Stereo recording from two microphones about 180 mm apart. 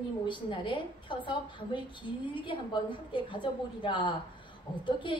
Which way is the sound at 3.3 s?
25° left (ahead or behind).